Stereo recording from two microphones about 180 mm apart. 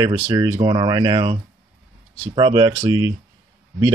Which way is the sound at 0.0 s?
20° right (ahead or behind).